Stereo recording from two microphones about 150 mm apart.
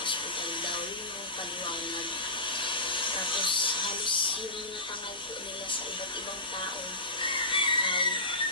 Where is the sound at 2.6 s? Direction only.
35° left (ahead or behind).